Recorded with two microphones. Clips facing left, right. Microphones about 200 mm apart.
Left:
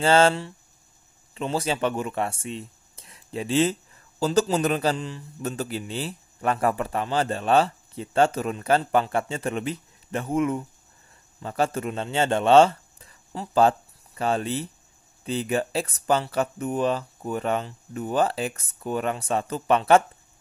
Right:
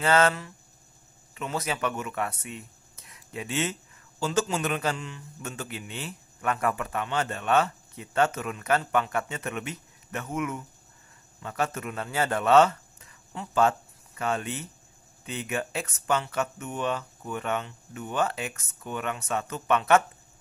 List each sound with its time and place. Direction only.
0.0 s a man's voice: 30° left (ahead or behind)